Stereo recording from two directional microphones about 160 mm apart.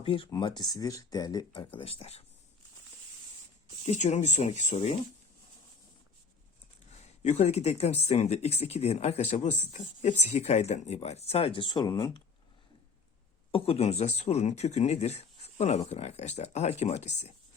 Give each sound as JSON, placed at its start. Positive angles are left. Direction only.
{"t": 0.0, "sound": "speech", "side_deg": 30}
{"t": 3.8, "sound": "speech", "side_deg": 50}
{"t": 6.9, "sound": "speech", "side_deg": 45}
{"t": 13.5, "sound": "speech", "side_deg": 35}